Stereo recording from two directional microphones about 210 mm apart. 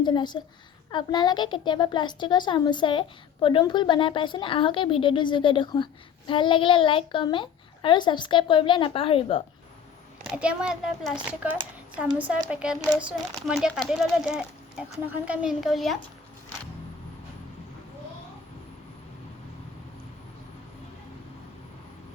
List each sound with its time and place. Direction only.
0.0 s a woman's voice: 20° left (ahead or behind)
10.2 s a woman's voice: 5° right (ahead or behind)